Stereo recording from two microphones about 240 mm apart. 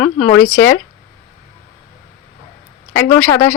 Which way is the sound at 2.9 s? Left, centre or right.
Centre.